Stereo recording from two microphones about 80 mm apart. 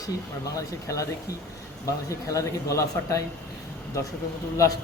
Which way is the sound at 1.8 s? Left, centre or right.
Left.